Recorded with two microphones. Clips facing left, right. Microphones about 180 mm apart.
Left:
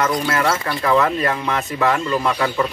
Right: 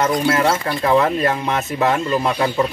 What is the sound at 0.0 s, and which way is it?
Speech, 30° right (ahead or behind).